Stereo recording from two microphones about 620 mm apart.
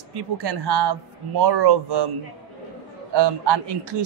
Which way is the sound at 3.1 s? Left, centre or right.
Right.